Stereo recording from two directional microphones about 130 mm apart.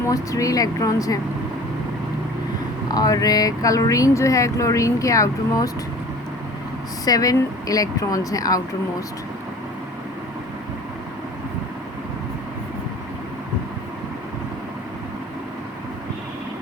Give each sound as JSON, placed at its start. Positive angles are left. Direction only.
{"t": 0.1, "sound": "speech", "side_deg": 25}
{"t": 2.9, "sound": "speech", "side_deg": 30}
{"t": 7.0, "sound": "speech", "side_deg": 30}